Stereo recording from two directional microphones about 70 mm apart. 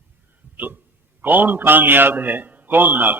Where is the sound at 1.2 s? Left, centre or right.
Right.